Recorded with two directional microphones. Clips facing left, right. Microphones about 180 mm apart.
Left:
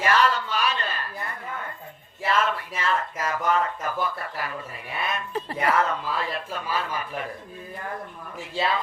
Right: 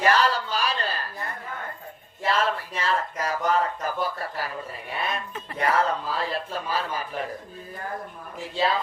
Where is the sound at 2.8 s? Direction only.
35° right (ahead or behind).